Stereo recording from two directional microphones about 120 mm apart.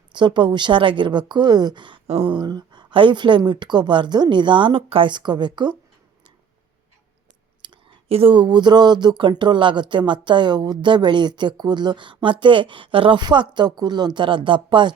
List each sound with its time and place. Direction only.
0.1 s speech: 40° right (ahead or behind)
2.0 s a sound: 55° right (ahead or behind)
2.3 s speech: 40° right (ahead or behind)
7.6 s speech: 55° right (ahead or behind)